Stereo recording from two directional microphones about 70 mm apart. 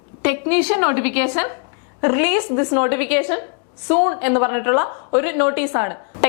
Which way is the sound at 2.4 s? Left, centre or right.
Left.